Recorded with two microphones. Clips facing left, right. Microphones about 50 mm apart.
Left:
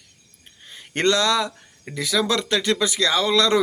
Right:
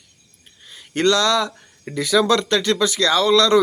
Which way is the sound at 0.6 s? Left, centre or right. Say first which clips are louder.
Right 3 dB; left.